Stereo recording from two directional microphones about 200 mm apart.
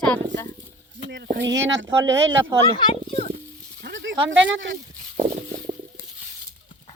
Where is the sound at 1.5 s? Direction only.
65° right (ahead or behind).